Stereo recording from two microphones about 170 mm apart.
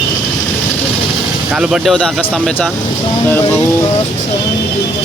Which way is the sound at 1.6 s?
Centre (ahead or behind).